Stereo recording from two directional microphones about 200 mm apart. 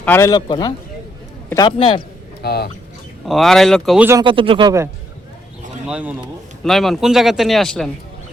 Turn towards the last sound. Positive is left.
turn(degrees=0)  # may be behind; listen again after turning